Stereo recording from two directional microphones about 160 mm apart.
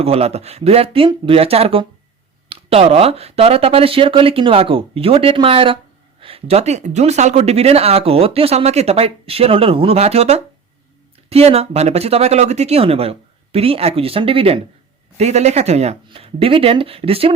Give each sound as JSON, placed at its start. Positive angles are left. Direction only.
{"t": 0.0, "sound": "speech", "side_deg": -40}